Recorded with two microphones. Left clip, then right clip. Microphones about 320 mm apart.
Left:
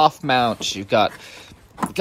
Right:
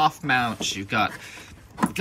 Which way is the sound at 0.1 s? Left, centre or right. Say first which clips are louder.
Left 4 dB; centre.